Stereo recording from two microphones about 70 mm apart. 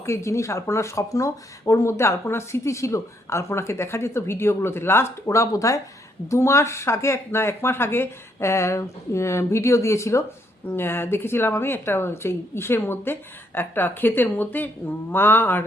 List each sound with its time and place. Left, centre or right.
0.0 s speech: left
10.7 s a woman's voice: left